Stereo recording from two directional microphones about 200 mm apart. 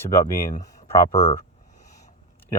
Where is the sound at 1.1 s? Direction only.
30° left (ahead or behind).